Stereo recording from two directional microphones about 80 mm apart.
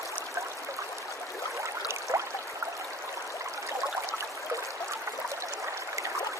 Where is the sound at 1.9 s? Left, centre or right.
Right.